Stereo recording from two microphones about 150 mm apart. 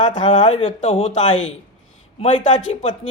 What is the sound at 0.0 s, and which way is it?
Speech, 30° left (ahead or behind).